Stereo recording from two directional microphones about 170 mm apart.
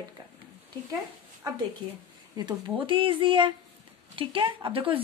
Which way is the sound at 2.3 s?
25° right (ahead or behind).